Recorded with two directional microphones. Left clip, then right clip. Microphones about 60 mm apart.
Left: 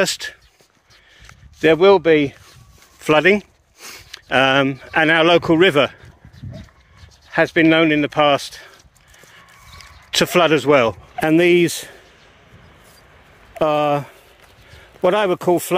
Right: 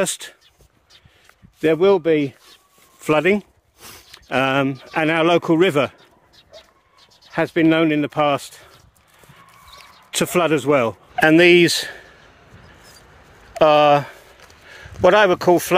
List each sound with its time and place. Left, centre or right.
0.0 s speech: right
1.6 s speech: centre
3.0 s speech: right
3.8 s a sound: right
4.3 s speech: right
4.6 s speech: right
4.9 s speech: right
9.3 s a sound: right
11.1 s speech: left
13.6 s speech: left